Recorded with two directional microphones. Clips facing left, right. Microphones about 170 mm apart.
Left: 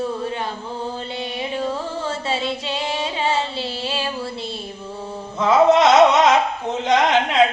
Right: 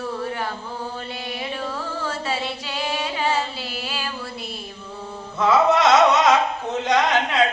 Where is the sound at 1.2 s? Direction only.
25° left (ahead or behind).